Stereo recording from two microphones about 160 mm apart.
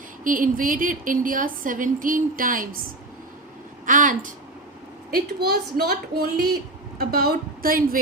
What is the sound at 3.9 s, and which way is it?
Speech, 55° right (ahead or behind).